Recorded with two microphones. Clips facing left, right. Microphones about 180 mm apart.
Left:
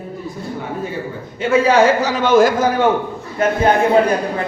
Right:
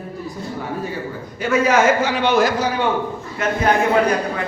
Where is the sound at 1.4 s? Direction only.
30° left (ahead or behind); by 2.9 s 50° left (ahead or behind).